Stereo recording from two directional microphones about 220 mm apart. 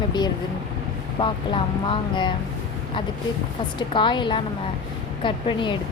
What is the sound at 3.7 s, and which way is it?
A woman's voice, 20° left (ahead or behind).